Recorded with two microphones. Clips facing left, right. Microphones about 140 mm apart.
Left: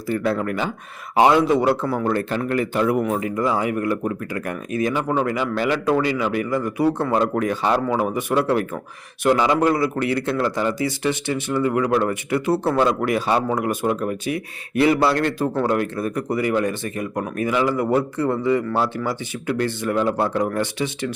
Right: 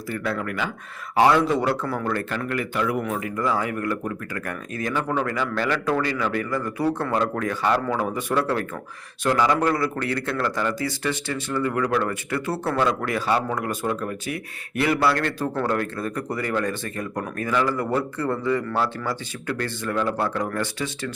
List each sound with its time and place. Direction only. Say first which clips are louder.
0.1 s a man's voice: left 6 dB; 30° left (ahead or behind)
1.1 s a man's voice: left 3 dB; 20° left (ahead or behind)